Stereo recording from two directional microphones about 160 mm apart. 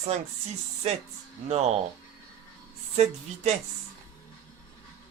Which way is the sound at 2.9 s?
45° right (ahead or behind).